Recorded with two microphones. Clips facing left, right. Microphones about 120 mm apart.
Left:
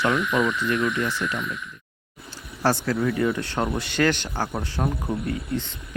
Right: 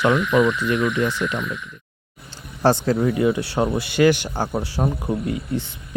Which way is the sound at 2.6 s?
25° right (ahead or behind).